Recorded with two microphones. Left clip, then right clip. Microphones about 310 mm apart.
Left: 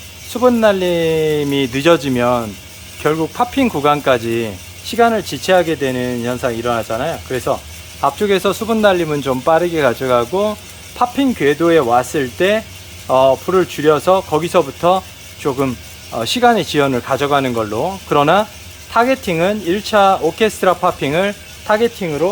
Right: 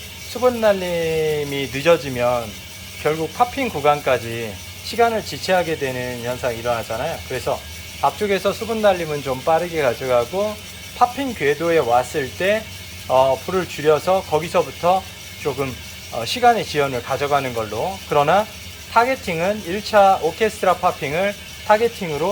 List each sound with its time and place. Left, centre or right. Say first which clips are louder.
0.3 s speech: left 4 dB; left
0.9 s a sound: left 5 dB; left
1.3 s speech: left 6 dB; left
13.1 s speech: left 4 dB; left